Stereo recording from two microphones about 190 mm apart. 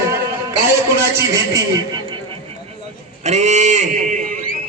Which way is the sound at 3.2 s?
35° right (ahead or behind).